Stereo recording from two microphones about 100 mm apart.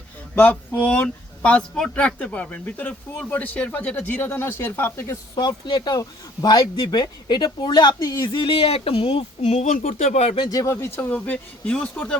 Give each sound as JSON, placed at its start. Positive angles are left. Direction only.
{"t": 0.3, "sound": "speech", "side_deg": 15}
{"t": 5.3, "sound": "speech", "side_deg": 45}
{"t": 7.9, "sound": "speech", "side_deg": 30}
{"t": 8.3, "sound": "speech", "side_deg": 60}
{"t": 10.5, "sound": "speech", "side_deg": 35}